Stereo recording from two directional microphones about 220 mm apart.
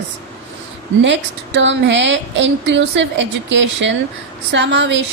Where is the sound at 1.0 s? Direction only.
55° right (ahead or behind).